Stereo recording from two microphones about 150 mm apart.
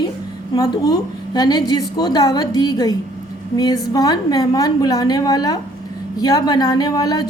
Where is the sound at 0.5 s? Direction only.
25° left (ahead or behind).